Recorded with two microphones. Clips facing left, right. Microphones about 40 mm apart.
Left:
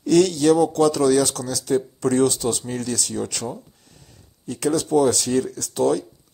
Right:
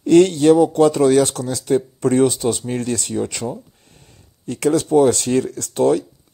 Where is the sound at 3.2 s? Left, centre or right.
Right.